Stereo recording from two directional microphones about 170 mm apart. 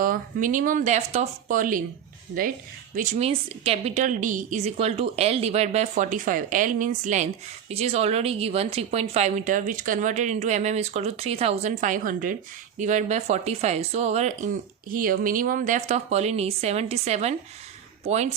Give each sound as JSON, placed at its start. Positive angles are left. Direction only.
{"t": 0.0, "sound": "speech", "side_deg": -55}
{"t": 2.9, "sound": "a woman's voice", "side_deg": -45}
{"t": 5.9, "sound": "a woman's voice", "side_deg": -50}